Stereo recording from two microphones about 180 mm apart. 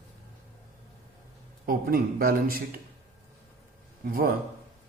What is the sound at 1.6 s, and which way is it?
Speech, 55° right (ahead or behind).